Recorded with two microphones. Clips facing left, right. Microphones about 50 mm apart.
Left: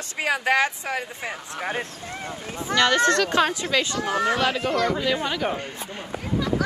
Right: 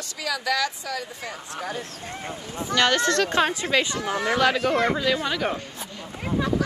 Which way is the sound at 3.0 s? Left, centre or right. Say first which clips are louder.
Left 2 dB; left.